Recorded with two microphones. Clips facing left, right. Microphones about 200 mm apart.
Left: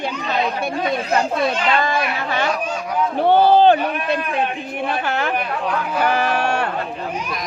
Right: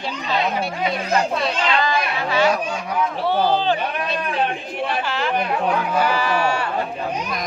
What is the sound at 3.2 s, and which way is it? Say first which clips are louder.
Speech: left 9 dB; 55° left (ahead or behind).